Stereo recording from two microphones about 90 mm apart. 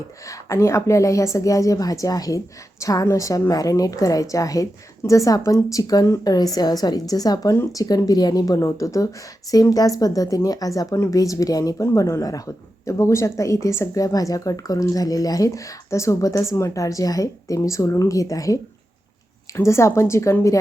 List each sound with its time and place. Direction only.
0.3 s a woman's voice: 35° left (ahead or behind)